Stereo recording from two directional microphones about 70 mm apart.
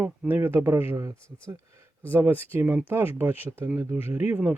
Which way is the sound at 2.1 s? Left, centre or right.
Right.